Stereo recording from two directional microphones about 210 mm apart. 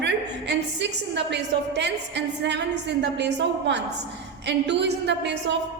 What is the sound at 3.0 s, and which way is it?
A woman's voice, 55° right (ahead or behind).